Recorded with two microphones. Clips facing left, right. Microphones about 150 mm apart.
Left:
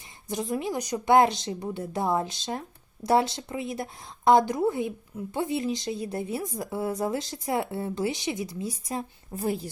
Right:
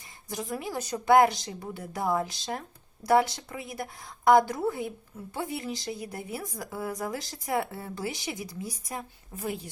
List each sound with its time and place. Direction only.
0.3 s a woman's voice: 20° left (ahead or behind)